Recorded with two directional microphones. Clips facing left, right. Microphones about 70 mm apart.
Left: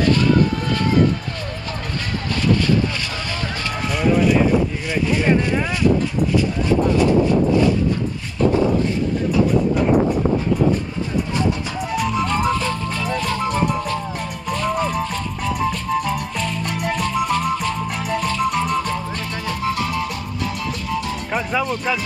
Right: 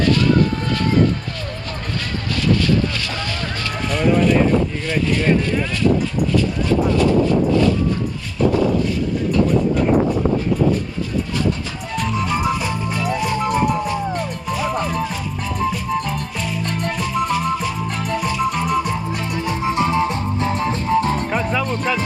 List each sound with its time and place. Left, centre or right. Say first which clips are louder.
3.9 s vehicle: right 1 dB; centre
4.8 s speech: even; centre
11.9 s music: left 1 dB; centre
16.7 s music: left 1 dB; centre
17.0 s music: even; centre
19.1 s music: right 3 dB; centre; by 21.3 s right
21.3 s music: right 1 dB; centre